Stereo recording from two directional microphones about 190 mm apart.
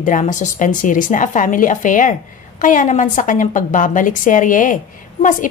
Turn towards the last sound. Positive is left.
turn(degrees=45)  # may be behind; listen again after turning